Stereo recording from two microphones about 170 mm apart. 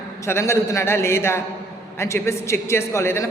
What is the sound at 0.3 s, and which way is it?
A man's voice, 15° left (ahead or behind).